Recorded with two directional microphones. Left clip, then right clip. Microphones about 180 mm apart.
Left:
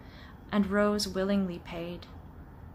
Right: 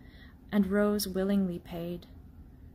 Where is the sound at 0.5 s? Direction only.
40° right (ahead or behind).